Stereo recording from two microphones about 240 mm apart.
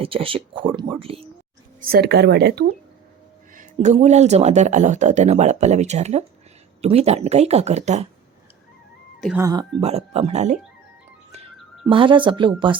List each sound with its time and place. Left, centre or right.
0.0 s speech: right
1.9 s speech: right
3.5 s a sound: right
3.9 s speech: right
9.4 s speech: centre
11.9 s speech: right